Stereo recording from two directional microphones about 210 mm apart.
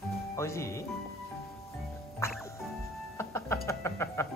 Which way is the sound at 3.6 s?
10° left (ahead or behind).